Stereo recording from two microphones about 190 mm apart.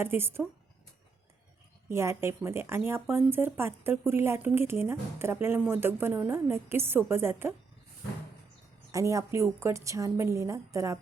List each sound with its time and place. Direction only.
0.0 s speech: 10° right (ahead or behind)
1.9 s speech: 15° right (ahead or behind)
8.9 s speech: 15° right (ahead or behind)